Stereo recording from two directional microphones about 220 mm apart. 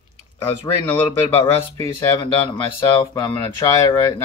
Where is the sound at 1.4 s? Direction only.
10° left (ahead or behind).